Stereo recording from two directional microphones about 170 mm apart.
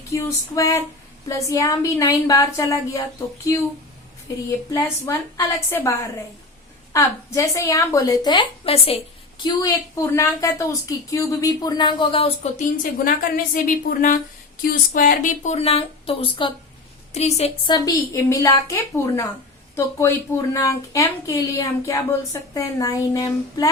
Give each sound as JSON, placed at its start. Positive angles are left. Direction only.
{"t": 0.1, "sound": "a woman's voice", "side_deg": 20}
{"t": 4.7, "sound": "a woman's voice", "side_deg": 20}
{"t": 9.4, "sound": "a woman's voice", "side_deg": 20}
{"t": 13.1, "sound": "a woman's voice", "side_deg": 55}
{"t": 17.7, "sound": "a woman's voice", "side_deg": 25}